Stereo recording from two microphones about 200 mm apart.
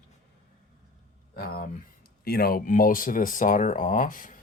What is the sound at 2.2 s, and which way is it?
Speech, 50° left (ahead or behind).